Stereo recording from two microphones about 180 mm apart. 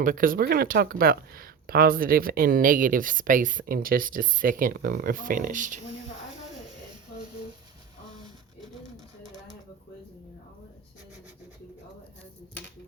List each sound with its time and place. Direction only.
0.0 s speech: 50° right (ahead or behind)